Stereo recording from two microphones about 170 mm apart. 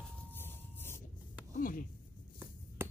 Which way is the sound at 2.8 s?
15° right (ahead or behind).